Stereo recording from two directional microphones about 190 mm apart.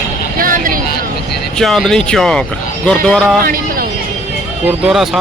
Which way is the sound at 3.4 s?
50° right (ahead or behind).